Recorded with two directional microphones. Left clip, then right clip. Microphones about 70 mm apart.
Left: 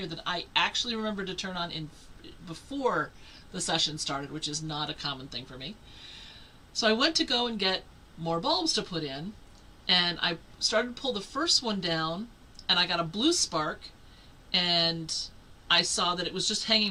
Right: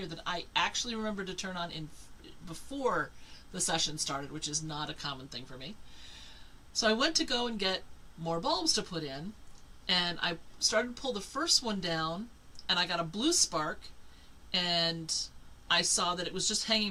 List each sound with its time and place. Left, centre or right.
0.0 s speech: centre